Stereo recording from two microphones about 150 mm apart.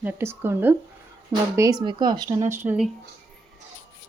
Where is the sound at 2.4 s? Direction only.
15° right (ahead or behind).